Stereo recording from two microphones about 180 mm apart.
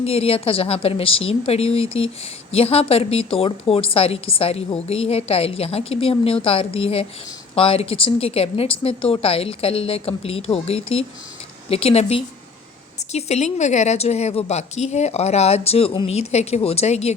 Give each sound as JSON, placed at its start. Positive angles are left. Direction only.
{"t": 0.0, "sound": "a woman's voice", "side_deg": 35}